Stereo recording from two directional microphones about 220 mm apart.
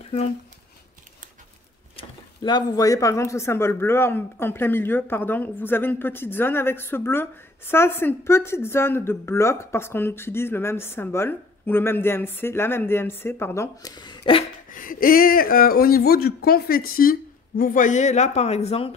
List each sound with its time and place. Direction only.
2.0 s speech: 20° left (ahead or behind)
14.7 s speech: 40° left (ahead or behind)